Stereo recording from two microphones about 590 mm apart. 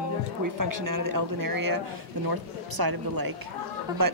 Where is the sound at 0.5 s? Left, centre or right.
Right.